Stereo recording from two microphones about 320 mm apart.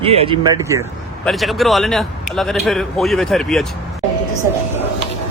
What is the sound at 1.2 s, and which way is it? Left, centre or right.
A man's voice, centre.